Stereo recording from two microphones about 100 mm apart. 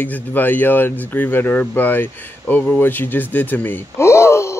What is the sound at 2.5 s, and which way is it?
Gasp, 15° left (ahead or behind).